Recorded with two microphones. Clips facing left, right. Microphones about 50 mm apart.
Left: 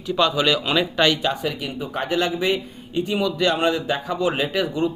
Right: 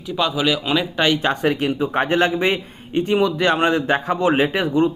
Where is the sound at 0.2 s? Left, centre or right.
Centre.